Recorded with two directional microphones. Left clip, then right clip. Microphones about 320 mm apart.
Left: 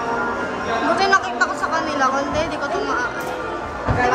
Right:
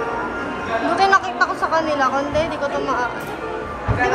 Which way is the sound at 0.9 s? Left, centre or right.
Centre.